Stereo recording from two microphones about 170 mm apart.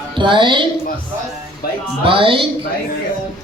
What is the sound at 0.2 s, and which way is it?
Speech, 30° right (ahead or behind).